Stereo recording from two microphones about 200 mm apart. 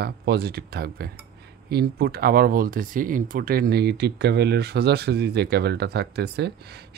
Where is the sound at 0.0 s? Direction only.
55° right (ahead or behind).